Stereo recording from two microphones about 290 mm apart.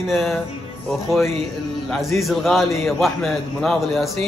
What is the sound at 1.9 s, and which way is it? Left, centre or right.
A man's voice, centre.